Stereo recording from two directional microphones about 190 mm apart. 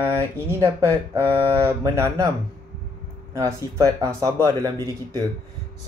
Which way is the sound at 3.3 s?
15° right (ahead or behind).